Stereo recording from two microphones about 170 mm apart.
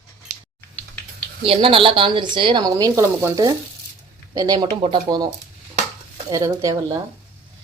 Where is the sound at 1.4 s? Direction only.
30° right (ahead or behind).